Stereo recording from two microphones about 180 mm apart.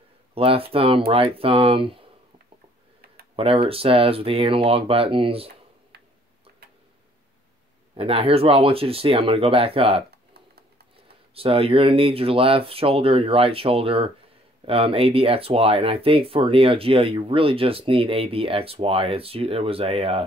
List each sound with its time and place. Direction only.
0.3 s speech: 30° right (ahead or behind)
3.3 s speech: 30° right (ahead or behind)
7.9 s speech: 30° right (ahead or behind)
10.1 s a sound: 60° right (ahead or behind)
11.3 s speech: 30° right (ahead or behind)